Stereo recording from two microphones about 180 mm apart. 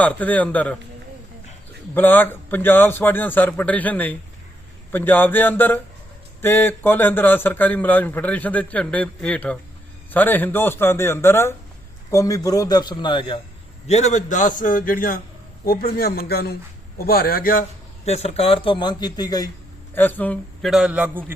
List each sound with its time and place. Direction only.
0.0 s a man's voice: 10° left (ahead or behind)
2.0 s a man's voice: 10° left (ahead or behind); by 13.4 s 25° left (ahead or behind)
13.8 s a man's voice: 40° left (ahead or behind)
18.0 s a man's voice: 35° left (ahead or behind)
19.9 s a man's voice: 10° left (ahead or behind); by 21.3 s 10° right (ahead or behind)